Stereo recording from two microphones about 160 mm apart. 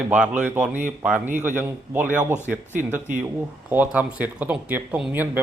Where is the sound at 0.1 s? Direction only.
10° right (ahead or behind).